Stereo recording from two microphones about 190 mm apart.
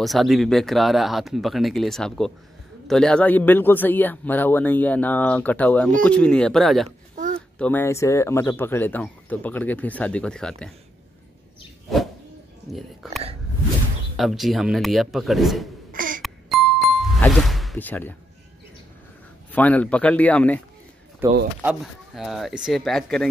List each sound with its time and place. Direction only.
0.0 s speech: centre (ahead or behind)
11.9 s a sound: centre (ahead or behind)
12.7 s speech: centre (ahead or behind)
15.9 s a sound: 45° right (ahead or behind)
16.2 s music: centre (ahead or behind)
19.5 s speech: 10° left (ahead or behind)
21.2 s speech: 10° right (ahead or behind)